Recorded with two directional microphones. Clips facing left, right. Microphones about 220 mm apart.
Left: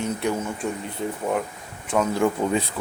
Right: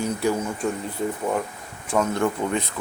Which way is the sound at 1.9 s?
5° left (ahead or behind).